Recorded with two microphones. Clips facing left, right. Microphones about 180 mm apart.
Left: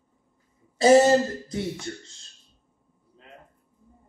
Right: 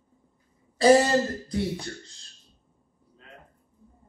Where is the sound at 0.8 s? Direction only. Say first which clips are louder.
Left 2 dB; 25° left (ahead or behind).